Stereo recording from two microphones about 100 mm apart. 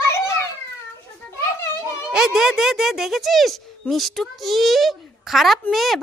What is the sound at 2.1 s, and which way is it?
A child's voice, 5° right (ahead or behind).